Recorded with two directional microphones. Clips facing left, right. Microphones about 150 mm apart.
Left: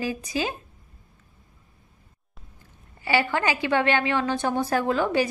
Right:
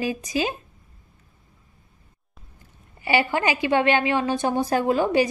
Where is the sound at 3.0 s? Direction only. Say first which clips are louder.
Right 2 dB; 15° right (ahead or behind).